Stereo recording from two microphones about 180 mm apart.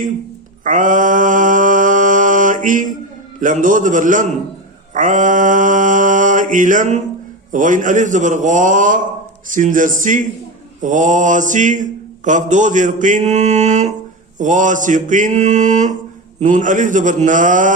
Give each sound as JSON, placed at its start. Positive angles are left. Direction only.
{"t": 0.6, "sound": "mantra", "side_deg": -45}